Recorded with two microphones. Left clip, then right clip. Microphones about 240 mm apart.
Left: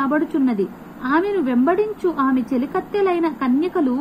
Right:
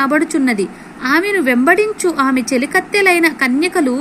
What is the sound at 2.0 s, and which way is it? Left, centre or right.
Speech, right.